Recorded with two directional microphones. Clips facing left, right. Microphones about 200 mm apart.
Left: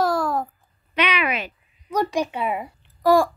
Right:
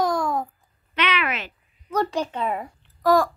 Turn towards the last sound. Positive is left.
turn(degrees=10)  # may be behind; listen again after turning